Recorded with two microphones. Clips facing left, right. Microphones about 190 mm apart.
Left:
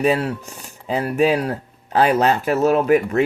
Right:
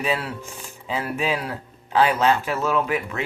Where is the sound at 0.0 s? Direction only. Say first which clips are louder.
Left 7 dB; 40° left (ahead or behind).